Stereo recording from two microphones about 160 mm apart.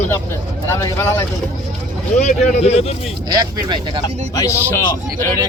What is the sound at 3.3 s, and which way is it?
Speech, 25° right (ahead or behind).